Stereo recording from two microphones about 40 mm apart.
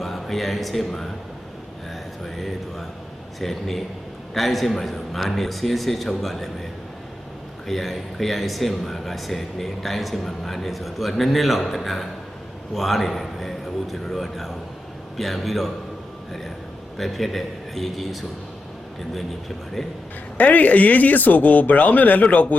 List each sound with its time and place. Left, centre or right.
0.0 s speech: centre
2.2 s speech: centre
7.7 s speech: centre
17.0 s speech: centre
20.4 s speech: left